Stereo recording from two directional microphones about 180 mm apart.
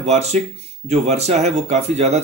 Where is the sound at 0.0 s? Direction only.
35° right (ahead or behind).